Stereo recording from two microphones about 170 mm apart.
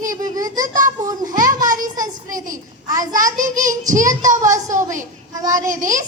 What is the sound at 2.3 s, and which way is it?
Speech, 50° right (ahead or behind).